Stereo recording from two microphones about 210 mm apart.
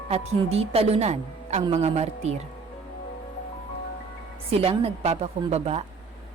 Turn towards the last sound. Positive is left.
turn(degrees=-30)  # may be behind; listen again after turning